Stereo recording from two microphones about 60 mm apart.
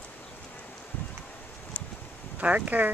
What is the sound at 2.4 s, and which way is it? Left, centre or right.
Speech, right.